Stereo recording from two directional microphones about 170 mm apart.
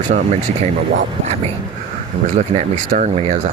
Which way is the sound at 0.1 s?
50° right (ahead or behind).